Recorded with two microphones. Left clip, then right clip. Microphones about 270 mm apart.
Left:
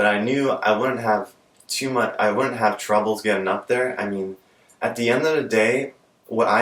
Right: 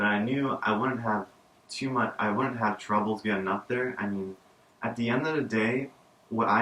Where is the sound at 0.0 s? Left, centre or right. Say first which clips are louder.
Left 8 dB; centre.